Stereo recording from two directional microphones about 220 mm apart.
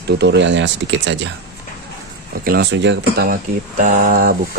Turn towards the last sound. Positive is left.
turn(degrees=-40)  # may be behind; listen again after turning